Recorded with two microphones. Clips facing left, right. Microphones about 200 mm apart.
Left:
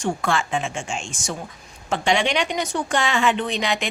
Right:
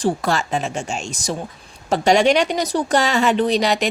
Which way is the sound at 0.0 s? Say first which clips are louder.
Right 3 dB; 40° right (ahead or behind).